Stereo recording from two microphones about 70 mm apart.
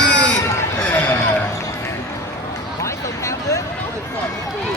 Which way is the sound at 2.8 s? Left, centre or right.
Left.